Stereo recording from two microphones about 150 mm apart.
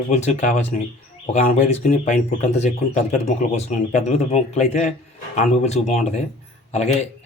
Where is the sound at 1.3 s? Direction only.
45° left (ahead or behind).